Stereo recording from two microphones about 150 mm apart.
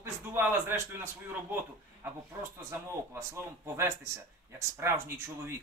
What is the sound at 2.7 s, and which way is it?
A man's voice, 20° right (ahead or behind).